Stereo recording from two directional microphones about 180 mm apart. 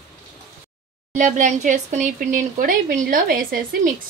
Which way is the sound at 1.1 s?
45° right (ahead or behind).